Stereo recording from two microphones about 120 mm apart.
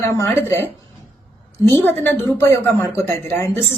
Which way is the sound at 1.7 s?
15° left (ahead or behind).